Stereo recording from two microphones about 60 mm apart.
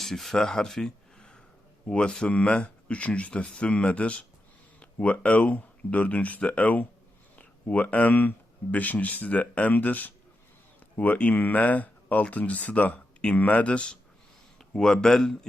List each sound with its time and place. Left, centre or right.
0.0 s speech: centre